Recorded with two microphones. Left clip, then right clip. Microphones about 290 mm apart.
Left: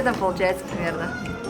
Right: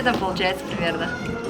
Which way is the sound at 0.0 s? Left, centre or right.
Centre.